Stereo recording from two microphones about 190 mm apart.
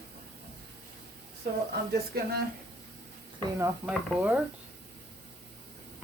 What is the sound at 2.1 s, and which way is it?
Speech, 55° right (ahead or behind).